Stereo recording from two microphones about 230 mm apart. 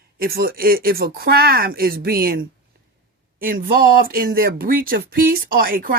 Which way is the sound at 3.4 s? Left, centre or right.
Right.